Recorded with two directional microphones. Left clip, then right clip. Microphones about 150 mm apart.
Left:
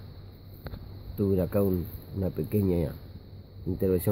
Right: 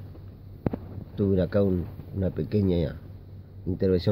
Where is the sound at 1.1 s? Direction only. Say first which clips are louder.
Right 2 dB; 5° left (ahead or behind).